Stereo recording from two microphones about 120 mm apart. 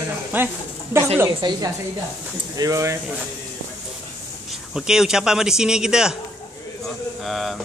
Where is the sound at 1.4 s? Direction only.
35° right (ahead or behind).